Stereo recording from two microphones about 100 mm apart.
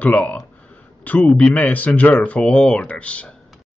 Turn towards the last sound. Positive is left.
turn(degrees=10)  # may be behind; listen again after turning